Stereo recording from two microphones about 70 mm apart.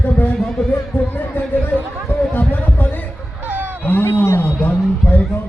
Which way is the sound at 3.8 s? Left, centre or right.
Left.